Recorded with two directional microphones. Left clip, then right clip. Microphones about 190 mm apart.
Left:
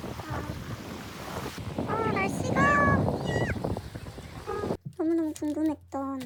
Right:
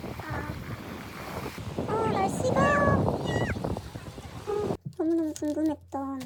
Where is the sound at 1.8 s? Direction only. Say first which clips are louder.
Right 1 dB; 40° left (ahead or behind).